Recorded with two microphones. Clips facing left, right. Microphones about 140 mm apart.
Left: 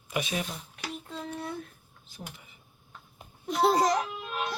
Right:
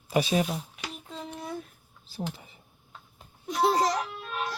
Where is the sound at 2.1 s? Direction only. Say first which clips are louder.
Right 9 dB; 30° right (ahead or behind).